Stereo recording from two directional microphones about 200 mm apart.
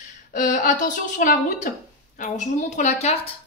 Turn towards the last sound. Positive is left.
turn(degrees=30)  # may be behind; listen again after turning